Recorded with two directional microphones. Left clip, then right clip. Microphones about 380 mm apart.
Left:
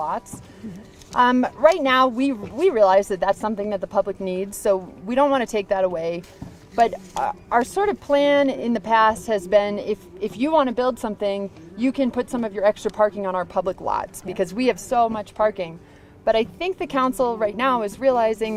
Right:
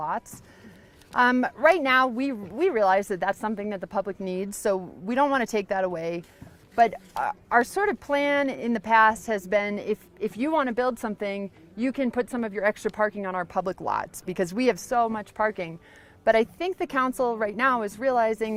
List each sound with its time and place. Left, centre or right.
0.0 s music: right
1.1 s speech: right